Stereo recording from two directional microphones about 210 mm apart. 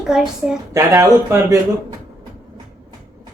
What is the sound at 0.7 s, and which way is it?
Speech, 15° right (ahead or behind).